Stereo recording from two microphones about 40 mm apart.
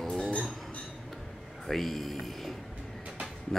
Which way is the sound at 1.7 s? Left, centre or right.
Centre.